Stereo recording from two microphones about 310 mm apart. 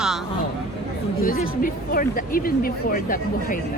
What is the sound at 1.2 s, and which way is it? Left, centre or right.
Speech, left.